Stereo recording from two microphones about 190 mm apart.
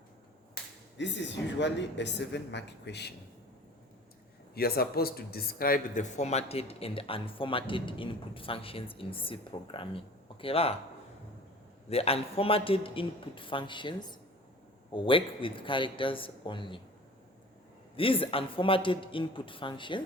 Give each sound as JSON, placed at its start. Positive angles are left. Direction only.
{"t": 0.5, "sound": "speech", "side_deg": 70}
{"t": 4.5, "sound": "speech", "side_deg": 55}
{"t": 11.9, "sound": "speech", "side_deg": 30}
{"t": 17.9, "sound": "speech", "side_deg": 30}